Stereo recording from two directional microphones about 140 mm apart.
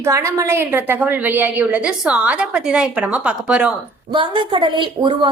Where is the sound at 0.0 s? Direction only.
20° right (ahead or behind).